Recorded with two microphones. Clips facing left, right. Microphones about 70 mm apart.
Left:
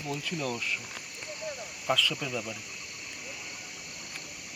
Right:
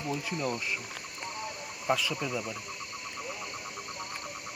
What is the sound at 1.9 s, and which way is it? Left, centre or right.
Speech, centre.